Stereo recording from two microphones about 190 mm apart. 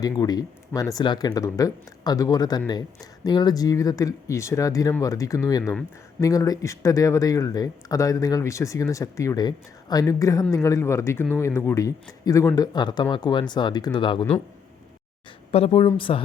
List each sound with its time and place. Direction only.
0.0 s speech: 20° left (ahead or behind)
15.5 s speech: 30° left (ahead or behind)